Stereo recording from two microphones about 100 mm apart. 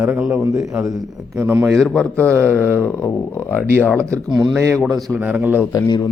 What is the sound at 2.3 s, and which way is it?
Speech, 25° right (ahead or behind).